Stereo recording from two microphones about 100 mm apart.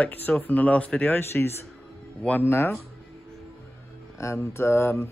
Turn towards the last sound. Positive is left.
turn(degrees=25)  # may be behind; listen again after turning